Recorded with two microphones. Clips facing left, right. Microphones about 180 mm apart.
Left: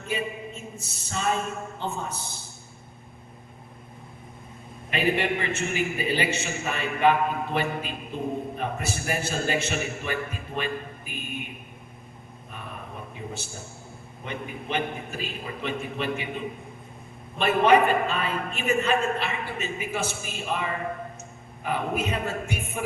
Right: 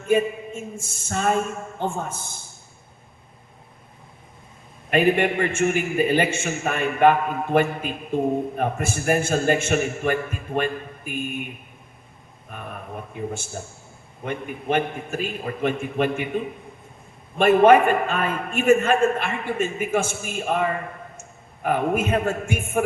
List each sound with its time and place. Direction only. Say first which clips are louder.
0.1 s a man's voice: right 10 dB; 50° right (ahead or behind)
4.9 s a man's voice: right 6 dB; 50° right (ahead or behind)
12.5 s a sound: right 5 dB; 50° right (ahead or behind)
13.6 s a man's voice: right 4 dB; 50° right (ahead or behind)
17.3 s a man's voice: right 6 dB; 50° right (ahead or behind)